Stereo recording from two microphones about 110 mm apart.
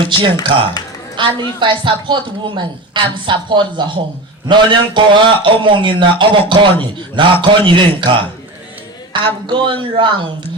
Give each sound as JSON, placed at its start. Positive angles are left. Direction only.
{"t": 0.5, "sound": "a woman's voice", "side_deg": -45}